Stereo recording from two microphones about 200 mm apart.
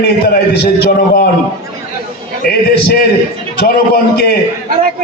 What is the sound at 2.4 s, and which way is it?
Speech, 50° left (ahead or behind).